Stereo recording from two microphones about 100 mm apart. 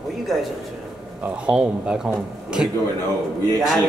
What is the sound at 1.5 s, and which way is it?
Speech, 10° right (ahead or behind).